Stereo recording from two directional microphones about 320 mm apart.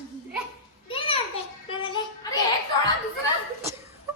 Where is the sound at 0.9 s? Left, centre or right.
Centre.